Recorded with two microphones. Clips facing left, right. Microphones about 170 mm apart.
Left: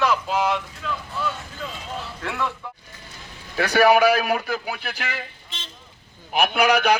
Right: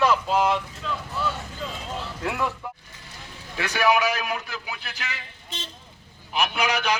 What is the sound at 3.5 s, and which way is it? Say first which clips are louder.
A man's voice: left 6 dB; 55° left (ahead or behind).